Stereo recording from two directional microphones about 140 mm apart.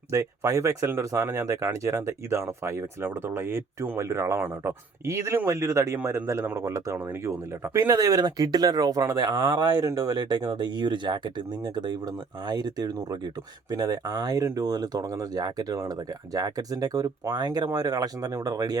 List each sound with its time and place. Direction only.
0.1 s speech: 25° right (ahead or behind)